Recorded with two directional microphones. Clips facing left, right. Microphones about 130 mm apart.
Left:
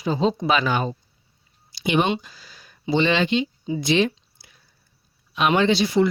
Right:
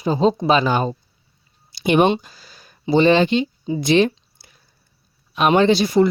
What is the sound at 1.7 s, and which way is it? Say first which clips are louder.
Speech: right 5 dB; 50° right (ahead or behind).